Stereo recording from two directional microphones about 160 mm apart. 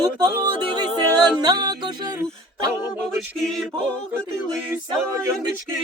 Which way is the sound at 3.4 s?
5° left (ahead or behind).